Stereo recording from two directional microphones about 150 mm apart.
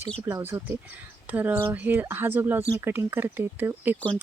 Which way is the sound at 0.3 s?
20° right (ahead or behind).